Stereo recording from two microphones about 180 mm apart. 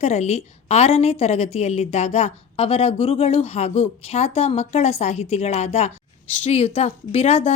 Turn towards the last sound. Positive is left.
turn(degrees=35)  # may be behind; listen again after turning